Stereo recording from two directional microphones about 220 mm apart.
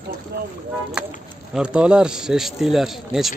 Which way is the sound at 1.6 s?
5° right (ahead or behind).